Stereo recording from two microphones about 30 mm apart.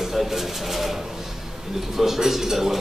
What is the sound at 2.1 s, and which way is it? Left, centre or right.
Speech, centre.